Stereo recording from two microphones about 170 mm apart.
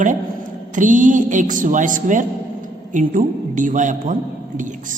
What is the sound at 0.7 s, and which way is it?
A man's voice, 50° right (ahead or behind).